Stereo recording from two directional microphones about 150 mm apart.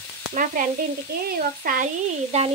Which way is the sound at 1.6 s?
65° right (ahead or behind).